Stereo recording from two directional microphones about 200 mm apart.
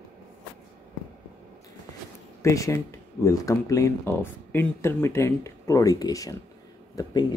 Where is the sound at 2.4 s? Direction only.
15° left (ahead or behind).